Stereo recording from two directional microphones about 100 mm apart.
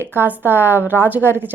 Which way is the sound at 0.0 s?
20° right (ahead or behind).